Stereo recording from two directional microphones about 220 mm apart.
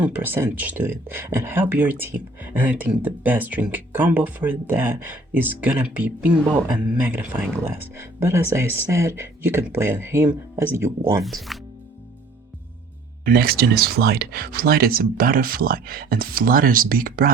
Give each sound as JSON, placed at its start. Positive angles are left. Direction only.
{"t": 0.0, "sound": "speech", "side_deg": -10}
{"t": 11.2, "sound": "speech", "side_deg": 0}
{"t": 13.2, "sound": "speech", "side_deg": -45}